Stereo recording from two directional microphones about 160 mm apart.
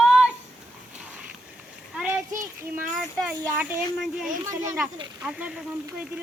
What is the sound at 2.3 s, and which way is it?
Child singing, 20° right (ahead or behind).